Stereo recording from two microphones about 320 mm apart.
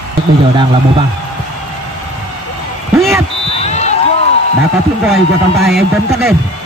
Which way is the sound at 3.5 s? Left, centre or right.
Centre.